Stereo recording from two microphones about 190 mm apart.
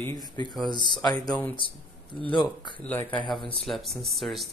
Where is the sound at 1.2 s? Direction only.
10° left (ahead or behind).